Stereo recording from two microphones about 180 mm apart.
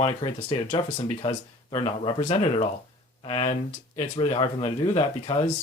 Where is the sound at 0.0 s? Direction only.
30° left (ahead or behind).